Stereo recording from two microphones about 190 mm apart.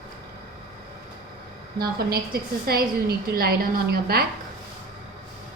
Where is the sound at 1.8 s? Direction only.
55° right (ahead or behind).